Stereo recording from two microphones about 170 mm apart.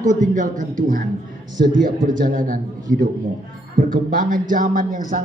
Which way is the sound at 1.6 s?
65° right (ahead or behind).